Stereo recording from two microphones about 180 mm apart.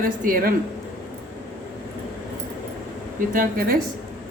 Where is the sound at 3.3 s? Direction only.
55° right (ahead or behind).